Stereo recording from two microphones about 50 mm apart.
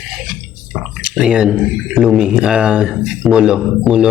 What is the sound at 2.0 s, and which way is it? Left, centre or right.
A man's voice, centre.